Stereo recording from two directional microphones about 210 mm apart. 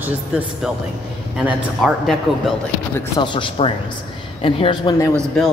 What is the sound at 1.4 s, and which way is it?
A man's voice, centre (ahead or behind).